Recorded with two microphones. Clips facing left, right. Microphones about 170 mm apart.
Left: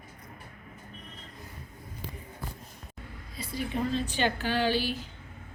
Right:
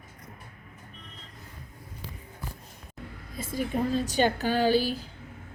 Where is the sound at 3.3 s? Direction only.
50° right (ahead or behind).